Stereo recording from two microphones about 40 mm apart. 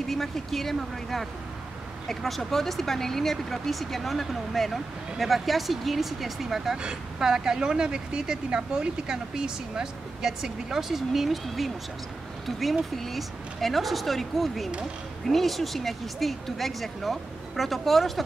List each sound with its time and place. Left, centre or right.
0.0 s speech: centre